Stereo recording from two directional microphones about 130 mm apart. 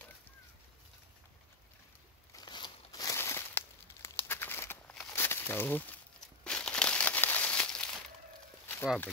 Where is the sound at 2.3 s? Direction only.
35° left (ahead or behind); by 7.9 s 5° left (ahead or behind).